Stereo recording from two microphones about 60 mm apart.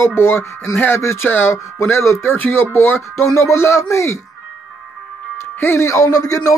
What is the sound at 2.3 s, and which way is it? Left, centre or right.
Speech, left.